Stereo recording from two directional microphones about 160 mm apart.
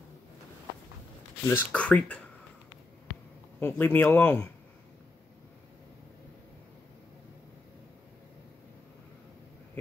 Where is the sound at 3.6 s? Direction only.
10° left (ahead or behind).